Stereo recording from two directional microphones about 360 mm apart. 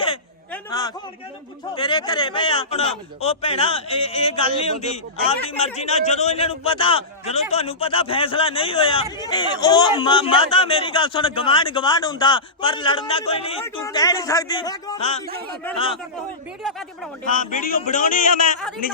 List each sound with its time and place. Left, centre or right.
0.0 s a sound: centre
1.7 s a man's voice: centre
17.2 s a man's voice: left